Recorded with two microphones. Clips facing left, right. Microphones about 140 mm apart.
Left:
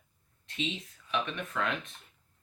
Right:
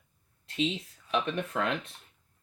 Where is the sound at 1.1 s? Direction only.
35° right (ahead or behind).